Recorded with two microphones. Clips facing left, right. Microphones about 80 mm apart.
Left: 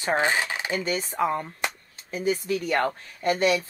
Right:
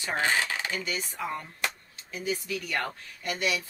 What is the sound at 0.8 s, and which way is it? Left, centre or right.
Speech, left.